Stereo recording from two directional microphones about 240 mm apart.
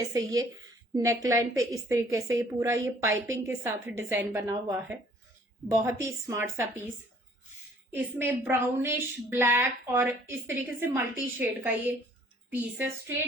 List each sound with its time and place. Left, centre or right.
0.0 s a woman's voice: centre
7.9 s a woman's voice: centre